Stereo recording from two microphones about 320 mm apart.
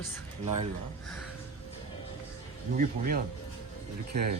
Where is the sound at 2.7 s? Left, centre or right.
Right.